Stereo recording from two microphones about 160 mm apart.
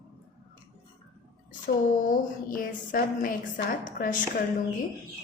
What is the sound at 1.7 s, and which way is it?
A woman's voice, 60° left (ahead or behind).